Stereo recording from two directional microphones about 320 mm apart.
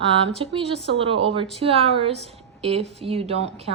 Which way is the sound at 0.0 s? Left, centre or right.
Centre.